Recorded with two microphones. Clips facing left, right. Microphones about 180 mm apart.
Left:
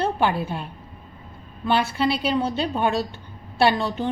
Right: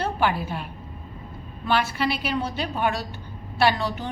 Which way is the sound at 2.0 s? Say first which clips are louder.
Left 4 dB; 25° left (ahead or behind).